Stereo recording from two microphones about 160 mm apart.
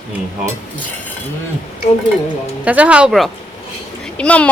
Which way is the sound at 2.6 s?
10° right (ahead or behind).